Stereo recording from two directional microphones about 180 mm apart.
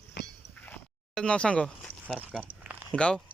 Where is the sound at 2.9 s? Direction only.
5° left (ahead or behind).